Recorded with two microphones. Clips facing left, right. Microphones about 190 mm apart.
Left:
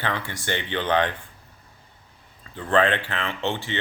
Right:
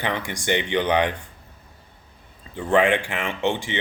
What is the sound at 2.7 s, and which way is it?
Speech, 10° right (ahead or behind).